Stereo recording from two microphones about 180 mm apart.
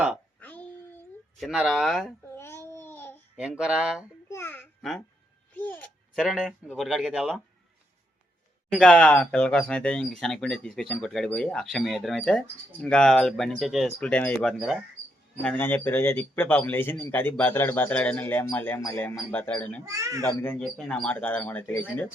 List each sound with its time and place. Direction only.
0.3 s a sound: 10° left (ahead or behind)
1.4 s speech: centre (ahead or behind)
2.3 s babbling: 15° left (ahead or behind)
3.3 s speech: 5° right (ahead or behind)
4.3 s babbling: 15° left (ahead or behind)
4.8 s a child's voice: centre (ahead or behind)
6.2 s speech: 5° right (ahead or behind)
8.7 s speech: 5° left (ahead or behind)
19.8 s speech: 20° right (ahead or behind)
20.4 s speech: 10° left (ahead or behind)